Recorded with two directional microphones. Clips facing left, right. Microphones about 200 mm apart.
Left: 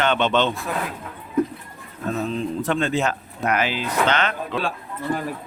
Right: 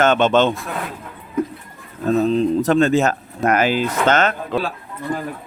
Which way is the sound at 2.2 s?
40° right (ahead or behind).